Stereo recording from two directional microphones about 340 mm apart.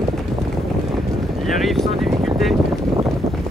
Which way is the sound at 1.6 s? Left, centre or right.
Centre.